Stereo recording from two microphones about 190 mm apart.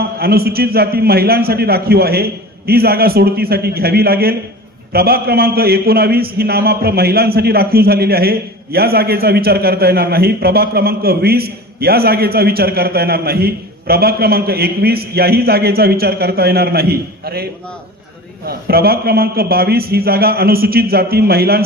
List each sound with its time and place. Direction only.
0.2 s a man's voice: 55° right (ahead or behind)